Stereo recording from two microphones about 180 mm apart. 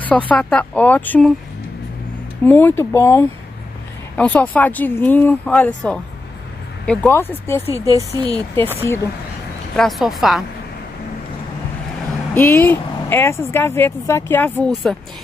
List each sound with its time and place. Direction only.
0.3 s speech: 5° left (ahead or behind)
2.4 s speech: 10° left (ahead or behind)
7.7 s speech: 15° right (ahead or behind)
8.7 s speech: 15° left (ahead or behind)
9.8 s speech: centre (ahead or behind)
12.4 s speech: 10° left (ahead or behind)